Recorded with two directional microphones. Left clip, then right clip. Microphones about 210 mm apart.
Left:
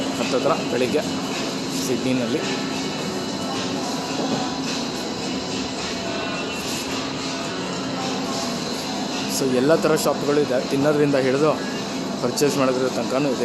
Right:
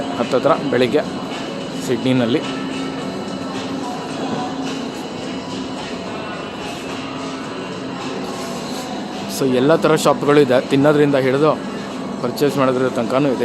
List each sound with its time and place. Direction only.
0.4 s speech: 15° right (ahead or behind)
9.6 s speech: 15° right (ahead or behind)
10.9 s speech: 10° right (ahead or behind)